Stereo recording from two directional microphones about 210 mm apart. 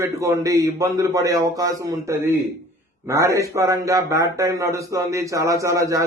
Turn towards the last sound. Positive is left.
turn(degrees=-15)  # may be behind; listen again after turning